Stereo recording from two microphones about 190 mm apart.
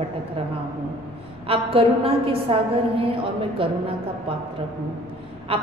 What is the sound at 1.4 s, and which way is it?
A woman's voice, 30° right (ahead or behind).